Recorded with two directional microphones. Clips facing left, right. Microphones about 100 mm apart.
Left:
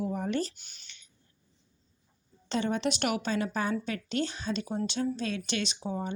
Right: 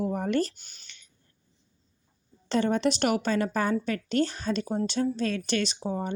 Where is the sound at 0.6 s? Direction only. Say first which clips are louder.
Right 1 dB; 40° right (ahead or behind).